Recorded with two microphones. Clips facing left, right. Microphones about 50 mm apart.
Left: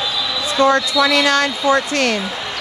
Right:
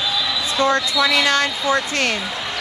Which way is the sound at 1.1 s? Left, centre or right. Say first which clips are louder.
Left 1 dB; right.